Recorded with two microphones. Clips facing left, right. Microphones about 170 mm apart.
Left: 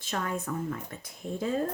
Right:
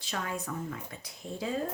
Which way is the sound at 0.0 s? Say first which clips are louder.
Left 3 dB; 45° left (ahead or behind).